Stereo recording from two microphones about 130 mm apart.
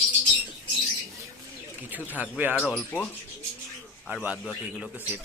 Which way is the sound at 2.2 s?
10° right (ahead or behind).